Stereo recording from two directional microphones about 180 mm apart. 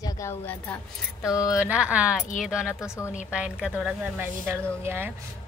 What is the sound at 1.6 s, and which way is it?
Speech, 5° right (ahead or behind).